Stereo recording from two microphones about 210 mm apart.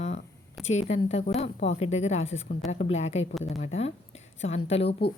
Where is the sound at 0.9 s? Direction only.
30° left (ahead or behind).